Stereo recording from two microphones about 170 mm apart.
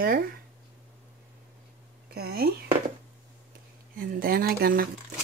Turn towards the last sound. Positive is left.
turn(degrees=-60)  # may be behind; listen again after turning